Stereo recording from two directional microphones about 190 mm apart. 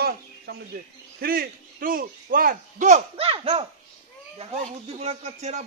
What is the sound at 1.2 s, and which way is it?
A man's voice, 50° right (ahead or behind).